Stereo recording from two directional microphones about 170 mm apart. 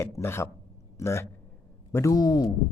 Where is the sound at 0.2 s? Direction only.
15° left (ahead or behind).